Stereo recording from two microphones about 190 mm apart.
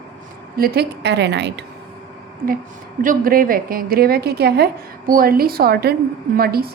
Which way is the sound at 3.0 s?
50° right (ahead or behind).